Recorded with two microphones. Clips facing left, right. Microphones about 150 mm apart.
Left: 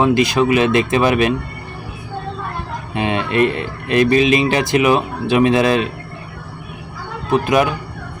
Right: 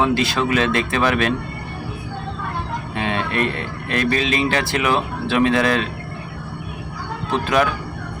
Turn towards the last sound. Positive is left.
turn(degrees=15)  # may be behind; listen again after turning